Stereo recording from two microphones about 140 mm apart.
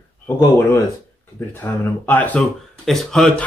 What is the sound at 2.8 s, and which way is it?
Speech, centre (ahead or behind).